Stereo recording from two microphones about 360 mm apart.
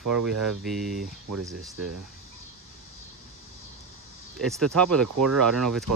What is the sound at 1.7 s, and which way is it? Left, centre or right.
Speech, right.